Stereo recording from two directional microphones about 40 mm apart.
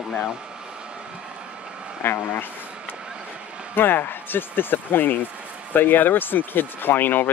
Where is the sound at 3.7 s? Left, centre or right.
Left.